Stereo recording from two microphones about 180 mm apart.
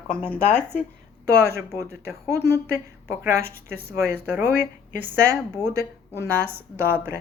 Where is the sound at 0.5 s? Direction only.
10° right (ahead or behind).